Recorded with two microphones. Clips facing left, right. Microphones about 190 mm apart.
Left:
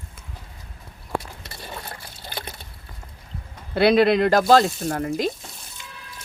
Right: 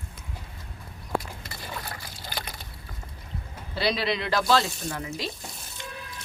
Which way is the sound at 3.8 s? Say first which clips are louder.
Left 11 dB; 55° left (ahead or behind).